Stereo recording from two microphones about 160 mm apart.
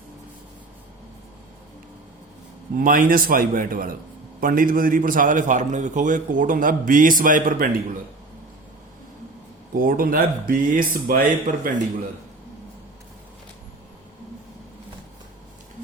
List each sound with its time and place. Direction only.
2.7 s a man's voice: 60° right (ahead or behind)
9.7 s a man's voice: 60° right (ahead or behind)